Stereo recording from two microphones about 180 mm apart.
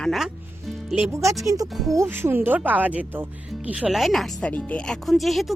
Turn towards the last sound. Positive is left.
turn(degrees=0)  # may be behind; listen again after turning